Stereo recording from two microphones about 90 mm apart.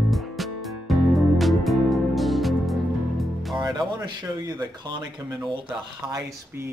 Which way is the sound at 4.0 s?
45° right (ahead or behind).